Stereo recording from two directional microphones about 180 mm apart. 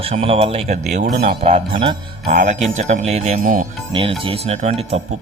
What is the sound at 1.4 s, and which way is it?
Speech, 35° right (ahead or behind).